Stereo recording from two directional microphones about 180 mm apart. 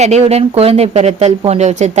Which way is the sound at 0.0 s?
40° right (ahead or behind).